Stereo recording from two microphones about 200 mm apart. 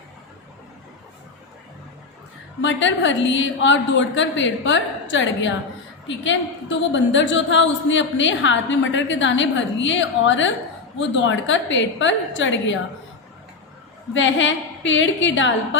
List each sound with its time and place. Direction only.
2.6 s a woman's voice: 70° left (ahead or behind)
14.1 s a woman's voice: 70° left (ahead or behind)